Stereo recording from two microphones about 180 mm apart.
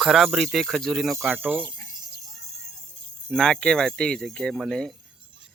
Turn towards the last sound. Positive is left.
turn(degrees=0)  # may be behind; listen again after turning